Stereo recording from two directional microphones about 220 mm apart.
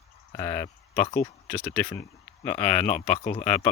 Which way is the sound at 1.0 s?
30° left (ahead or behind).